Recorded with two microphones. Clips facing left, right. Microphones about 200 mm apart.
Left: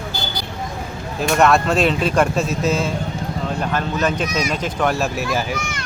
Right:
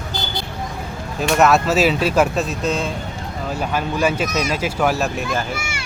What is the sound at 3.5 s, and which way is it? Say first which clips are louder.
Speech: right 2 dB; 10° right (ahead or behind).